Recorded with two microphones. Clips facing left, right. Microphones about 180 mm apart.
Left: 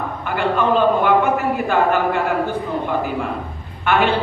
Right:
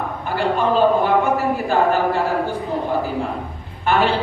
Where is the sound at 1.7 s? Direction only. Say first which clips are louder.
Even; 35° right (ahead or behind).